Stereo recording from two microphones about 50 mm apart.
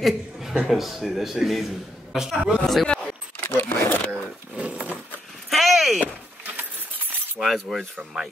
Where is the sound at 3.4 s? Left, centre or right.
Left.